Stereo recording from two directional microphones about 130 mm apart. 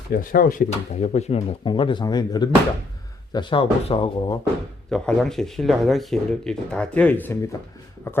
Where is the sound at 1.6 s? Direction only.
40° left (ahead or behind).